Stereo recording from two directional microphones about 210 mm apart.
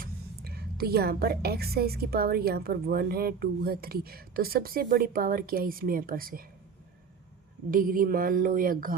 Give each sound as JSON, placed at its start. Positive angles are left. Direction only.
{"t": 0.0, "sound": "a woman's voice", "side_deg": -45}
{"t": 7.7, "sound": "speech", "side_deg": -40}